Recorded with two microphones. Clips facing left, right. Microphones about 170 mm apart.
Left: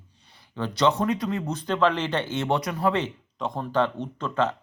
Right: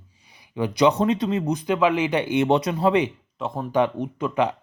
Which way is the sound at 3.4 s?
5° right (ahead or behind).